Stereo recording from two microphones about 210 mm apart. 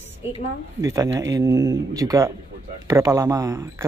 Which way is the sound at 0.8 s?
15° right (ahead or behind).